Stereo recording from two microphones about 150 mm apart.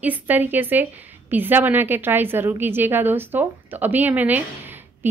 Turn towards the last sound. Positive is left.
turn(degrees=-15)  # may be behind; listen again after turning